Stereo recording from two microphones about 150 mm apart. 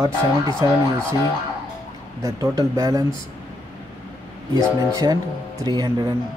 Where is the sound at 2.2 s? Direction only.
25° right (ahead or behind).